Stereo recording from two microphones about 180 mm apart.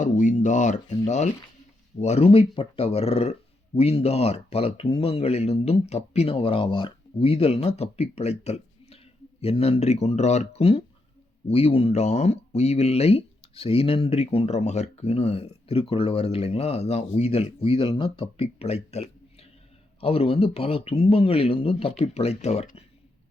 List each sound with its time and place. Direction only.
0.0 s speech: 45° left (ahead or behind)